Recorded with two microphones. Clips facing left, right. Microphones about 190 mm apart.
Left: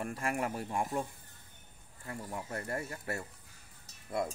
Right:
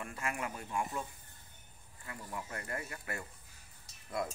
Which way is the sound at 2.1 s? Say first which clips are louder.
Left 4 dB; 40° left (ahead or behind).